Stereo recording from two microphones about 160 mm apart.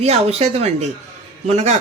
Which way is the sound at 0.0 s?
40° right (ahead or behind).